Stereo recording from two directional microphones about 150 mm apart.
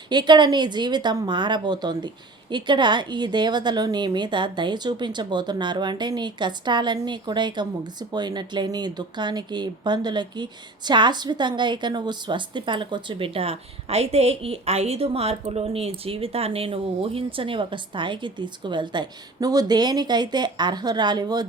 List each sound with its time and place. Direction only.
0.1 s a woman's voice: 30° right (ahead or behind)